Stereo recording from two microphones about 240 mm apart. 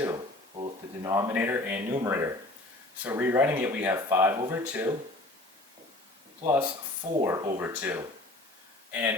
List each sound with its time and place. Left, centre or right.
0.0 s speech: centre
6.4 s speech: centre